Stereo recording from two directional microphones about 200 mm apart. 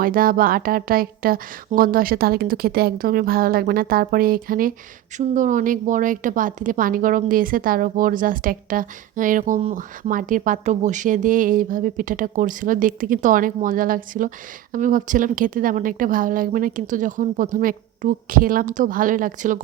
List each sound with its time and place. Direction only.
0.0 s a woman's voice: 45° right (ahead or behind)